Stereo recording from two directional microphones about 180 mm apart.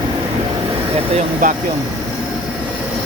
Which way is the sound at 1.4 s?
50° right (ahead or behind).